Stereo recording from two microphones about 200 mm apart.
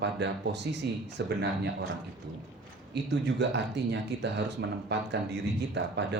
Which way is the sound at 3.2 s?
60° right (ahead or behind).